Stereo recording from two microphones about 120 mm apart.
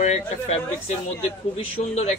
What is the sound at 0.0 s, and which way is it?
Speech, 70° left (ahead or behind).